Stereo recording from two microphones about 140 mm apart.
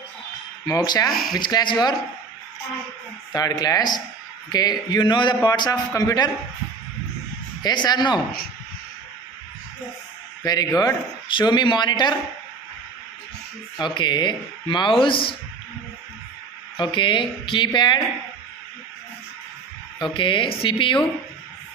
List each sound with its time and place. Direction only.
0.6 s a man's voice: 25° left (ahead or behind)
1.0 s speech: centre (ahead or behind)
1.4 s a man's voice: 30° left (ahead or behind)
3.3 s a man's voice: 25° left (ahead or behind)
7.6 s speech: 30° left (ahead or behind)
10.4 s a man's voice: 30° left (ahead or behind)
13.7 s speech: 35° left (ahead or behind)
16.8 s speech: 35° left (ahead or behind)
20.1 s speech: 35° left (ahead or behind)